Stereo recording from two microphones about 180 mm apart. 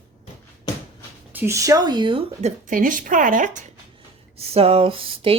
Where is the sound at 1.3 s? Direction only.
15° right (ahead or behind); by 2.5 s 30° right (ahead or behind).